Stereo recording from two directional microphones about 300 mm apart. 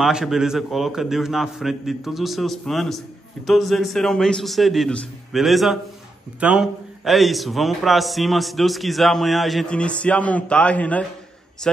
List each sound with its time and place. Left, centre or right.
0.0 s a man's voice: centre